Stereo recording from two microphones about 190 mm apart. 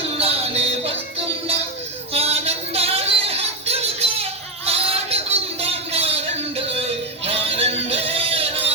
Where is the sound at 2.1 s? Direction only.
30° right (ahead or behind).